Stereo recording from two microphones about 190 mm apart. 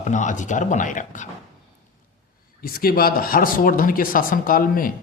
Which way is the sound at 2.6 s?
50° left (ahead or behind).